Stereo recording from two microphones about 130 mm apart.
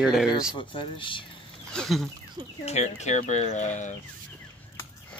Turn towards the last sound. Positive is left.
turn(degrees=60)  # may be behind; listen again after turning